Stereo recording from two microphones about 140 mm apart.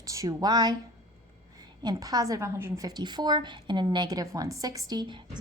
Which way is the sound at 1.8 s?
30° right (ahead or behind).